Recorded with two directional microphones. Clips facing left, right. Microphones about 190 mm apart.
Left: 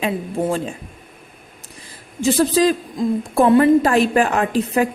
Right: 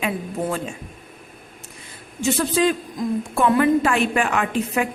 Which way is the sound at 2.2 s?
35° left (ahead or behind).